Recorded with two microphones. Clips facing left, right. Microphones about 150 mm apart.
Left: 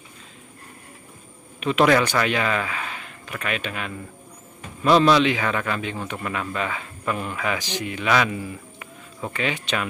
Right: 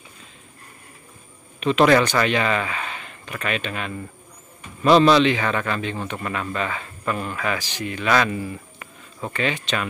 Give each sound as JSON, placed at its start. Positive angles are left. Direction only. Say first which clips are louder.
{"t": 1.6, "sound": "a man's voice", "louder": "right 2 dB", "side_deg": 5}